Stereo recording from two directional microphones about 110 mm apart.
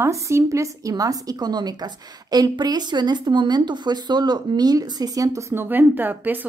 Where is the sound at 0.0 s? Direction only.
25° right (ahead or behind).